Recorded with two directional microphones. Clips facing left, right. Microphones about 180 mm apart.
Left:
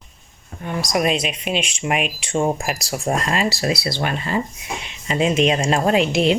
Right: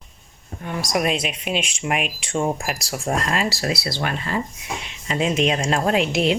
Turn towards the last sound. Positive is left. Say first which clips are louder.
# left 3 dB
turn(degrees=0)  # may be behind; listen again after turning